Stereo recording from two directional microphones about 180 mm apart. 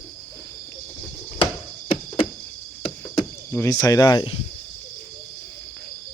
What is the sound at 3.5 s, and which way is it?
Speech, 20° left (ahead or behind).